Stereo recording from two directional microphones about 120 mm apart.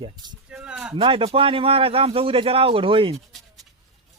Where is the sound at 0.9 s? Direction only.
50° right (ahead or behind).